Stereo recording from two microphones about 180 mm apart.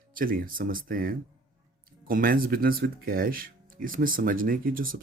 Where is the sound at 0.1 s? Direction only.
50° right (ahead or behind).